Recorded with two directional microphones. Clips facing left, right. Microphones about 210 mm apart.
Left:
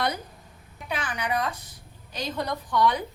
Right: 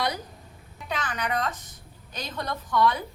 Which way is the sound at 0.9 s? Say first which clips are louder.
Even; 10° left (ahead or behind).